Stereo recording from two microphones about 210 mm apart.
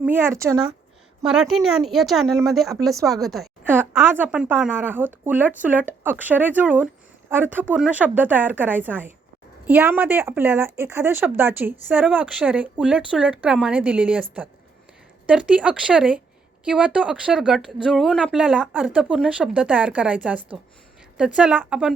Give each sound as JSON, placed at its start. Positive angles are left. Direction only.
{"t": 0.0, "sound": "speech", "side_deg": -10}
{"t": 1.2, "sound": "speech", "side_deg": -5}